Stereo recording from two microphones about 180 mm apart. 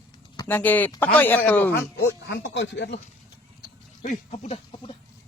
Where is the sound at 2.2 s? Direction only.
75° left (ahead or behind).